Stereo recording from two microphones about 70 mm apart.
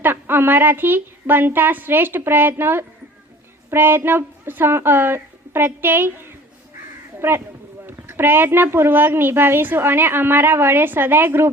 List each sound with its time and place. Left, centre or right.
0.0 s speech: right